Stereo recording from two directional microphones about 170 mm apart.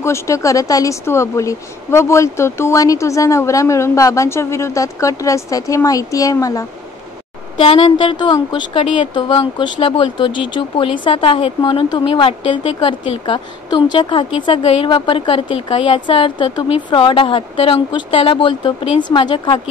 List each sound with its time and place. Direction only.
0.0 s speech: 15° left (ahead or behind)
7.5 s a woman's voice: 30° left (ahead or behind)